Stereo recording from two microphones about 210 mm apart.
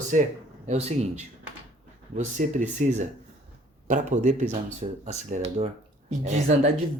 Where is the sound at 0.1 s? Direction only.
40° right (ahead or behind).